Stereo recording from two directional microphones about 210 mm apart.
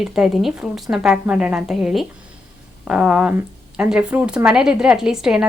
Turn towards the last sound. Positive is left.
turn(degrees=-5)  # may be behind; listen again after turning